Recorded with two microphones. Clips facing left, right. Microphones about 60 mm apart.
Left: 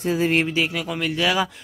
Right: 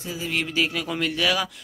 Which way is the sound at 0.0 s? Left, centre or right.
Left.